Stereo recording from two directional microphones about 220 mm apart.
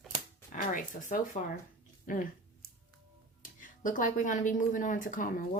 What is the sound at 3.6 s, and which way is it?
A woman's voice, 35° left (ahead or behind).